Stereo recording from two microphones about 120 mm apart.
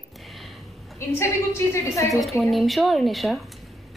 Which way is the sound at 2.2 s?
Centre (ahead or behind).